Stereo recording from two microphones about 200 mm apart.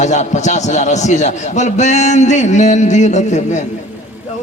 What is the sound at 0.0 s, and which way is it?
A man's voice, 35° left (ahead or behind).